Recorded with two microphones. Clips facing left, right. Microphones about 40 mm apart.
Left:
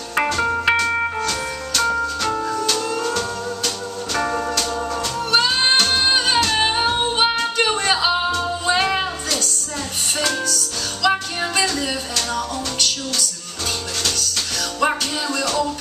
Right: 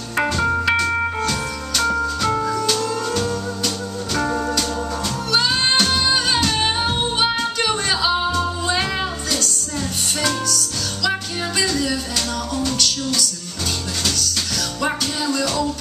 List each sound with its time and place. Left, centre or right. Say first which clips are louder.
0.4 s music: right 1 dB; centre
1.8 s music: even; centre; by 13.2 s left
14.8 s music: left 3 dB; centre